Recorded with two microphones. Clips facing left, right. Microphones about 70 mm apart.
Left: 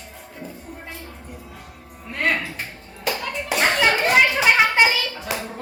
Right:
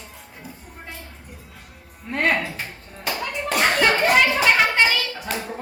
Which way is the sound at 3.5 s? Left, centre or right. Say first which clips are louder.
Even; centre.